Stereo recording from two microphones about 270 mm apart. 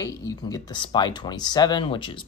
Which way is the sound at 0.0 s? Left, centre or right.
Centre.